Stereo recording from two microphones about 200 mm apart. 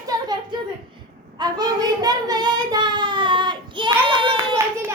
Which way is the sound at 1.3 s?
20° right (ahead or behind).